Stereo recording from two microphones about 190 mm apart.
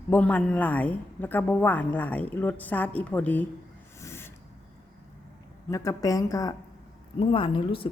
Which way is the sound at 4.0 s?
15° left (ahead or behind).